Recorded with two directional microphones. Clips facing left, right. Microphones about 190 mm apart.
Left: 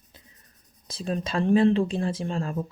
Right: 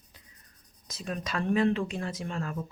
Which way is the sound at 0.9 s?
30° left (ahead or behind).